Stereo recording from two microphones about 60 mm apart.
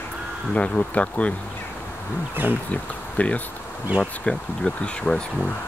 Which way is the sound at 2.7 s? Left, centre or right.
Left.